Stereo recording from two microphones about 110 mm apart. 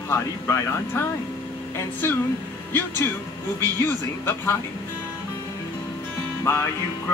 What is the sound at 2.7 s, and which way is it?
Music, 20° left (ahead or behind).